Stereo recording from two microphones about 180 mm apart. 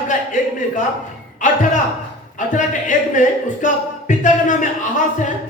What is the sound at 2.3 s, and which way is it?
Speech, 45° left (ahead or behind).